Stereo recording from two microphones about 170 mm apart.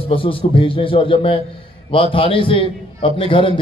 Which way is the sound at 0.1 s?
30° left (ahead or behind).